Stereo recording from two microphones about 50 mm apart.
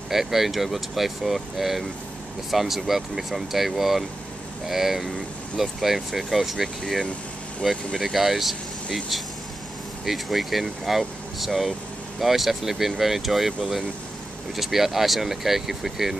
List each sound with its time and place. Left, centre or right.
0.1 s speech: centre
6.8 s speech: centre
7.6 s speech: centre
10.0 s speech: centre